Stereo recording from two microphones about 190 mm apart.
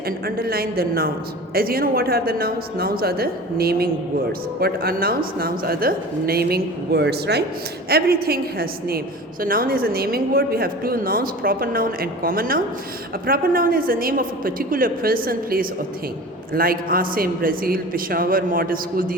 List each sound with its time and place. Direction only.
0.3 s a woman's voice: 55° right (ahead or behind)